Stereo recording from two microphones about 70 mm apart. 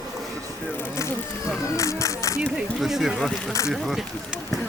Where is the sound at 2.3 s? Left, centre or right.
Centre.